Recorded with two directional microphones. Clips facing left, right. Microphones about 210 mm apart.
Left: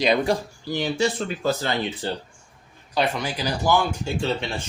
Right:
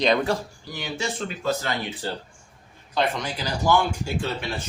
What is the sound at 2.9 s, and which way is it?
Speech, 10° left (ahead or behind).